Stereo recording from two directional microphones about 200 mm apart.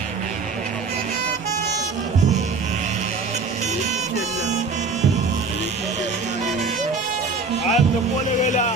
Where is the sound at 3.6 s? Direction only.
35° right (ahead or behind).